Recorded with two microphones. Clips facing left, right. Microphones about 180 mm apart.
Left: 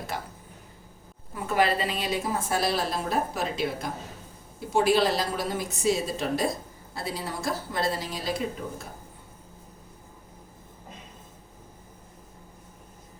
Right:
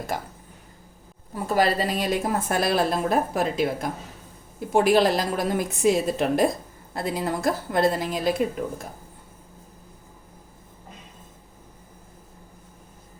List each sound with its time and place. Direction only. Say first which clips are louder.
1.5 s a woman's voice: right 3 dB; 40° right (ahead or behind)